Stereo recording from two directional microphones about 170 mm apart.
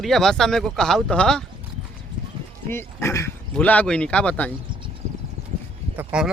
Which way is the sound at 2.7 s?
15° left (ahead or behind).